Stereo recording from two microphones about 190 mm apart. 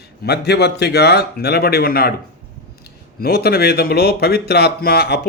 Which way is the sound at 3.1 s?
55° left (ahead or behind).